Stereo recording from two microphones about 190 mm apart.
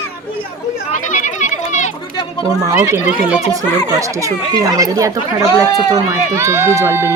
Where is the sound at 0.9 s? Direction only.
40° left (ahead or behind).